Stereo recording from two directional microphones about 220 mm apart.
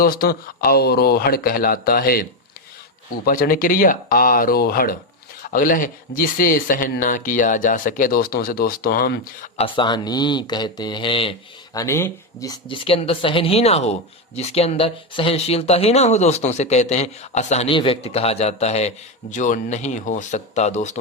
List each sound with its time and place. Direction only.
0.0 s speech: 40° left (ahead or behind)
3.2 s speech: 40° left (ahead or behind)
9.6 s speech: 25° left (ahead or behind)